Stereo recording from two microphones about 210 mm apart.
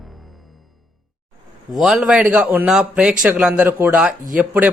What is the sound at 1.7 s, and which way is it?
A man's voice, centre (ahead or behind).